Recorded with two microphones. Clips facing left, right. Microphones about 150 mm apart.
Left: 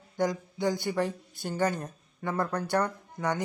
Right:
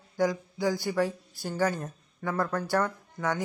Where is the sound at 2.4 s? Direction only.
20° left (ahead or behind).